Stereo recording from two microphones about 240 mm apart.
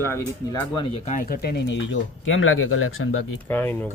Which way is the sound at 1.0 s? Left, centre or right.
Left.